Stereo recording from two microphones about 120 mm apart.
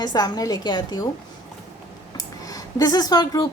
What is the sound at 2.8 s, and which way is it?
Speech, 30° left (ahead or behind).